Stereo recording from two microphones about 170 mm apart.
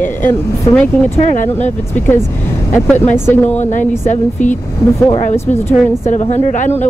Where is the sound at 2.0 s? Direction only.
15° left (ahead or behind).